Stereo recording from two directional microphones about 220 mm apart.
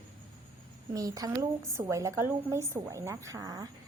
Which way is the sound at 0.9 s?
15° right (ahead or behind).